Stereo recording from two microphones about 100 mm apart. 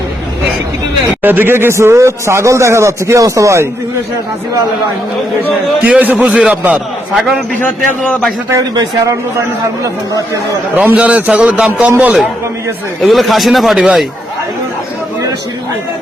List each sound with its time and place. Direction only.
1.2 s speech: 20° right (ahead or behind)
5.8 s a man's voice: 15° right (ahead or behind)
10.8 s a man's voice: 15° right (ahead or behind)
13.0 s speech: centre (ahead or behind)